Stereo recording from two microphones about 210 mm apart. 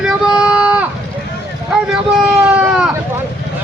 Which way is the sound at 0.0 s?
5° right (ahead or behind).